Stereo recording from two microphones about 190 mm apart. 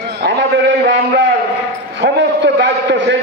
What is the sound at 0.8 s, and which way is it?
A man's voice, 65° right (ahead or behind).